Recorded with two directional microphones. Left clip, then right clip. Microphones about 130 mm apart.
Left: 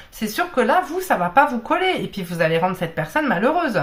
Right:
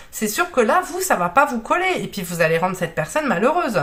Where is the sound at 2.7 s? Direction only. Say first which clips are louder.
Right 1 dB; 35° right (ahead or behind).